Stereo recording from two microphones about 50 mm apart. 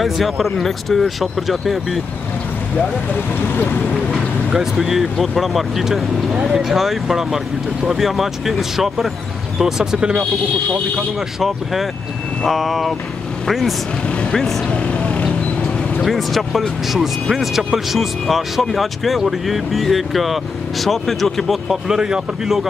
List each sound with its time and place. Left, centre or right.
0.0 s speech: centre
3.3 s speech: left
4.7 s speech: centre
11.3 s speech: centre
14.7 s vehicle: left
16.0 s speech: centre
21.6 s speech: centre